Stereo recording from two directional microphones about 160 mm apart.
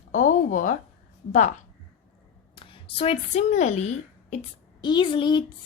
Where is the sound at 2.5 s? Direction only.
30° left (ahead or behind).